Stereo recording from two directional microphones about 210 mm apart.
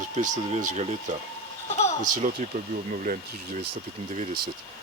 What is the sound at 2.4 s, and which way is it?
Speech, 35° right (ahead or behind).